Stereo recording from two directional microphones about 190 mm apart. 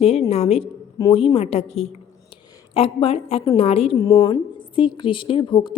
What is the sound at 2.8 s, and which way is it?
A woman's voice, 30° left (ahead or behind).